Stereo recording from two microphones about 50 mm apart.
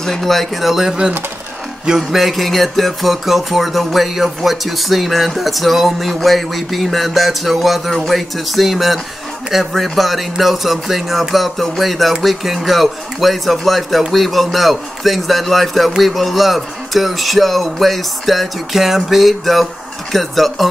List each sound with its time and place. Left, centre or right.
0.0 s music: centre